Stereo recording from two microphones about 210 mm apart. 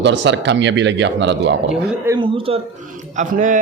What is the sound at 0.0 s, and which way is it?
Speech, 60° right (ahead or behind).